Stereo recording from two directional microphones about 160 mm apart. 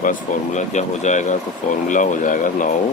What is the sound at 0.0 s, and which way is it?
Speech, 55° left (ahead or behind).